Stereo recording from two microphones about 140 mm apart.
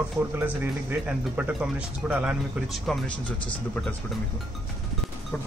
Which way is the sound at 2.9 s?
Centre (ahead or behind).